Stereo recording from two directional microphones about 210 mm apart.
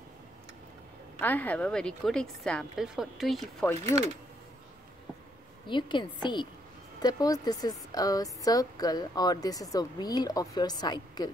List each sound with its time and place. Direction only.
1.2 s a woman's voice: 10° left (ahead or behind)
3.8 s speech: 30° right (ahead or behind)
5.7 s a woman's voice: 20° left (ahead or behind)